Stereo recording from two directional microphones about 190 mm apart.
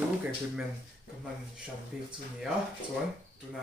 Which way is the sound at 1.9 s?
Centre (ahead or behind).